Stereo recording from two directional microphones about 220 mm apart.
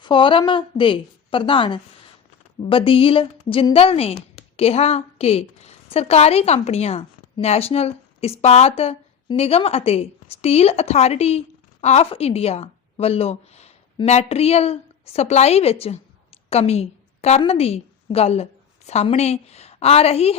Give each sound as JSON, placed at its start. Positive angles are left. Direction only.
{"t": 0.0, "sound": "a woman's voice", "side_deg": 20}